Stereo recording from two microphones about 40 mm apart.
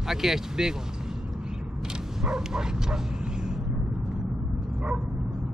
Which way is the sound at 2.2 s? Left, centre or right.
Centre.